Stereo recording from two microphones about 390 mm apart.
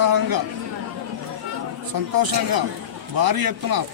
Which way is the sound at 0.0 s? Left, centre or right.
Right.